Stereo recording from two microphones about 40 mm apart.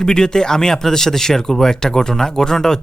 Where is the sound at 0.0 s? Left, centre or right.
Centre.